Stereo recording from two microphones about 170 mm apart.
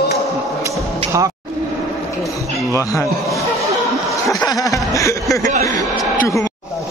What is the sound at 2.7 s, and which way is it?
Speech, 20° left (ahead or behind).